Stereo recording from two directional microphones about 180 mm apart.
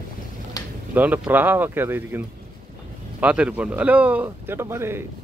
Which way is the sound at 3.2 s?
5° right (ahead or behind).